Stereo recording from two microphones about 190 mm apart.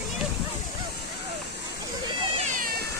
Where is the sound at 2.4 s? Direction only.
45° right (ahead or behind).